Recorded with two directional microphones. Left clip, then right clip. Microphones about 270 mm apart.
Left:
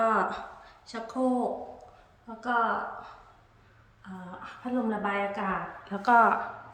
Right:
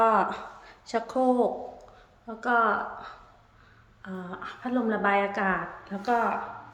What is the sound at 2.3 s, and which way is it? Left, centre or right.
Speech, centre.